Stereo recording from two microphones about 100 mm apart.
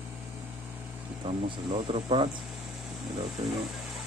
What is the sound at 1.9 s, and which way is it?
Speech, 70° right (ahead or behind).